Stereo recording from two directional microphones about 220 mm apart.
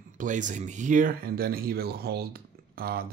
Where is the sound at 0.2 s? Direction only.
35° right (ahead or behind).